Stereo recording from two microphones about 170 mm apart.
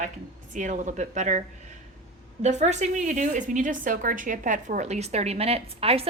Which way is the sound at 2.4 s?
40° right (ahead or behind).